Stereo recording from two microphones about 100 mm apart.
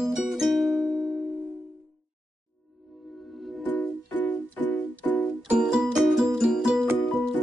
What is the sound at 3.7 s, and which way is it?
Music, 15° left (ahead or behind).